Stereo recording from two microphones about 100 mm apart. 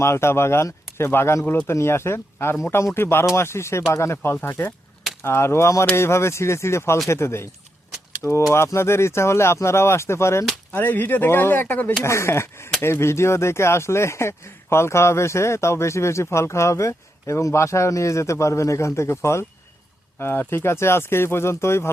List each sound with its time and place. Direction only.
0.0 s speech: 25° left (ahead or behind)